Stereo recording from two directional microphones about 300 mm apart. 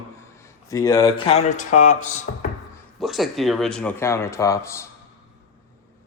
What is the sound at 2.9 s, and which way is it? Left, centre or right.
Speech, centre.